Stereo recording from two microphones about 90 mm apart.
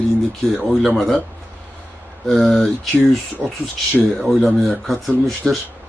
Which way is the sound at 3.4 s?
25° right (ahead or behind).